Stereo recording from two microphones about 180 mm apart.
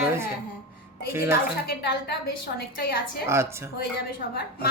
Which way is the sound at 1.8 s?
65° left (ahead or behind).